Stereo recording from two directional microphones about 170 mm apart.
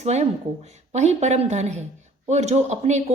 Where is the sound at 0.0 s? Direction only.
40° right (ahead or behind).